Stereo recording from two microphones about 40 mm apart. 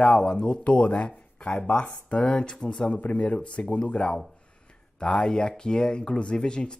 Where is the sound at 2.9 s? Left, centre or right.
Left.